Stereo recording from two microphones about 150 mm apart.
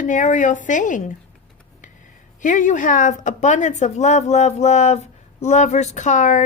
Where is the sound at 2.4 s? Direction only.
55° left (ahead or behind).